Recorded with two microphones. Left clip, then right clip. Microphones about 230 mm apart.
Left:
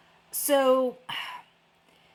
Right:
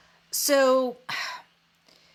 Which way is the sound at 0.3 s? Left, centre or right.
Right.